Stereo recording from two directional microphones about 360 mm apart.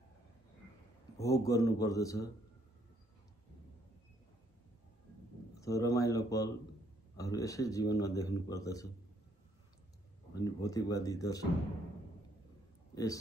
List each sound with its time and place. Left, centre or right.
1.1 s a man's voice: centre
5.5 s a man's voice: centre
10.4 s a man's voice: centre
12.9 s speech: centre